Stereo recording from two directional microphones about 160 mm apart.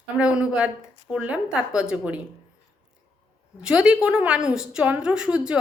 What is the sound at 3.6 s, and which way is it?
A woman's voice, 5° right (ahead or behind).